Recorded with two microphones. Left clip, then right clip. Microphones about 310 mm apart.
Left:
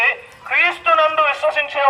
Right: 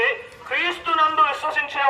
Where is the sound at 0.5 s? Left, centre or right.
Centre.